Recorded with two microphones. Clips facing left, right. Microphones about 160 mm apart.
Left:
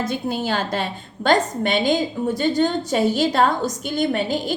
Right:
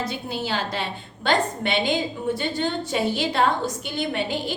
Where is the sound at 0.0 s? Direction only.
45° left (ahead or behind).